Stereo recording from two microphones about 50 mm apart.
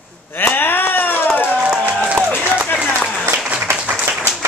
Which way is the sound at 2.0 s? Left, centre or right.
Right.